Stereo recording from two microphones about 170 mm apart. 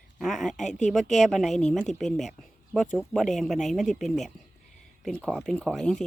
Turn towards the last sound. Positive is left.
turn(degrees=5)  # may be behind; listen again after turning